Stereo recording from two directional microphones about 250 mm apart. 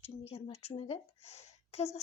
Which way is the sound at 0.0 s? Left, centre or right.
Left.